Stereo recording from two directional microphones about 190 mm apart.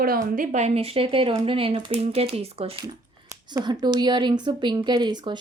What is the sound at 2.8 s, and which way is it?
Speech, 20° right (ahead or behind).